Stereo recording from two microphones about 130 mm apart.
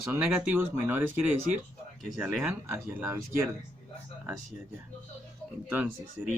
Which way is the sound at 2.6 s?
20° right (ahead or behind).